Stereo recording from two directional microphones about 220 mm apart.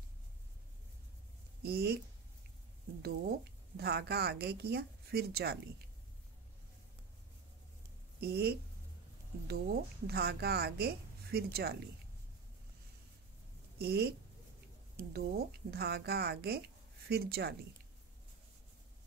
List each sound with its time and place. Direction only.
1.6 s a woman's voice: 45° right (ahead or behind)
3.0 s a woman's voice: 45° right (ahead or behind)
8.2 s a woman's voice: 45° right (ahead or behind)
13.7 s a woman's voice: 45° right (ahead or behind)
15.1 s a woman's voice: 45° right (ahead or behind)